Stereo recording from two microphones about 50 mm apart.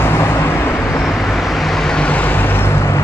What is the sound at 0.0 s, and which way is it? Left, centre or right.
Vehicle, left.